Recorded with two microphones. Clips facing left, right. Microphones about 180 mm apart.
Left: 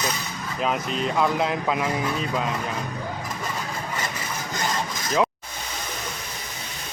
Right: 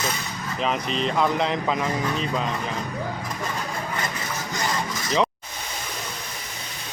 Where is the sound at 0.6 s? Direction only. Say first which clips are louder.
Even; 5° left (ahead or behind).